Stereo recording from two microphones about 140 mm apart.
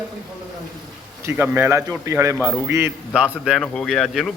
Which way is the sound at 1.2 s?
15° right (ahead or behind).